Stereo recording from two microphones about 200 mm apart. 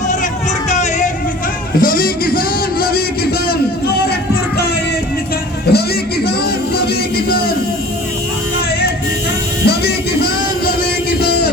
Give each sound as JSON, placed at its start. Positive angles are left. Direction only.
{"t": 0.7, "sound": "music", "side_deg": 35}
{"t": 1.8, "sound": "speech", "side_deg": 45}
{"t": 5.7, "sound": "a sound", "side_deg": 55}
{"t": 9.6, "sound": "music", "side_deg": 50}